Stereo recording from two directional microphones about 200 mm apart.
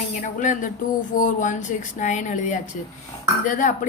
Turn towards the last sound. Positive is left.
turn(degrees=40)  # may be behind; listen again after turning